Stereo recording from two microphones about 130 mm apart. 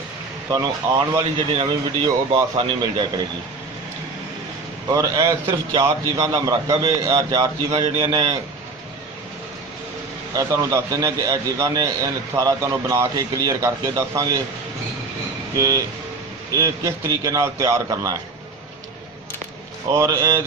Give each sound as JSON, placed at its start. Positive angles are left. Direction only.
{"t": 0.5, "sound": "speech", "side_deg": -30}
{"t": 4.9, "sound": "a man's voice", "side_deg": -30}
{"t": 10.3, "sound": "a man's voice", "side_deg": -25}
{"t": 15.5, "sound": "a man's voice", "side_deg": -25}
{"t": 19.9, "sound": "a man's voice", "side_deg": -25}